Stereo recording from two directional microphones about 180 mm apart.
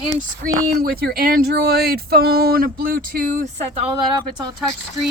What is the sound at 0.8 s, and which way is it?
Speech, 60° right (ahead or behind).